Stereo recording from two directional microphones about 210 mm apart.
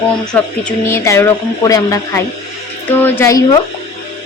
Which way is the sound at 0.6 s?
10° left (ahead or behind).